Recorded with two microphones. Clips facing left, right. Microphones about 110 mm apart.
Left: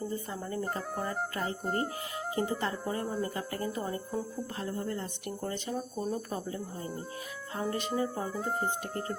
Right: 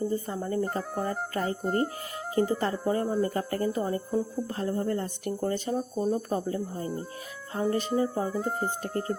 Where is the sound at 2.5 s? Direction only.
40° right (ahead or behind).